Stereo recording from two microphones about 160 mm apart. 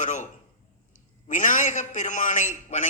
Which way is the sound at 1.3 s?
50° left (ahead or behind).